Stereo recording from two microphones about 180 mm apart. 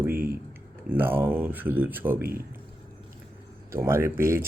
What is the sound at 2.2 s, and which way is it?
Speech, 55° right (ahead or behind).